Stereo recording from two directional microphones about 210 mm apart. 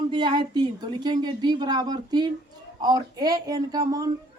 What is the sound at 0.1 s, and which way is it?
A woman's voice, 20° right (ahead or behind).